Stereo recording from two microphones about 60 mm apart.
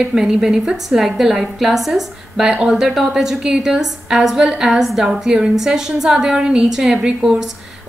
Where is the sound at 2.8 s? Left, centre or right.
Centre.